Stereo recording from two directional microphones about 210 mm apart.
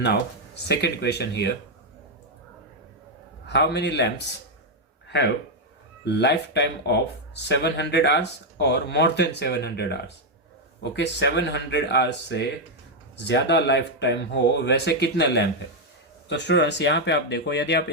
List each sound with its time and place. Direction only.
0.0 s speech: 55° left (ahead or behind)
3.4 s speech: 55° left (ahead or behind)
6.1 s speech: 55° left (ahead or behind)